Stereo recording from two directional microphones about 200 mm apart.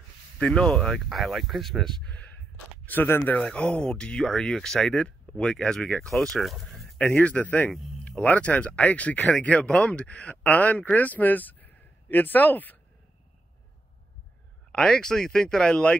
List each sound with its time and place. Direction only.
0.4 s speech: 5° left (ahead or behind)
14.7 s speech: 5° left (ahead or behind)